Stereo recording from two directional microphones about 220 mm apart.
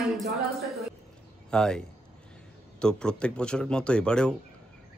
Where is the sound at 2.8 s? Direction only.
5° left (ahead or behind).